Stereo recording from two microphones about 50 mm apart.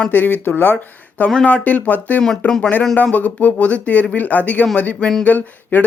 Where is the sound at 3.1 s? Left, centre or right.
Left.